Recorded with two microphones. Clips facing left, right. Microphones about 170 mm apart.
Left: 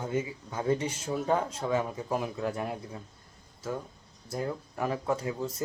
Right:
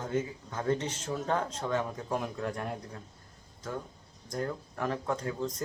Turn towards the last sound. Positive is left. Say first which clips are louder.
# left 2 dB
turn(degrees=10)  # may be behind; listen again after turning